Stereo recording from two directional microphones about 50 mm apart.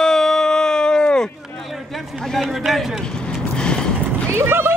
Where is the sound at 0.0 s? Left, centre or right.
Centre.